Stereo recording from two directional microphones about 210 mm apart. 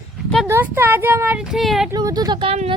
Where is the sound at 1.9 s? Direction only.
15° right (ahead or behind).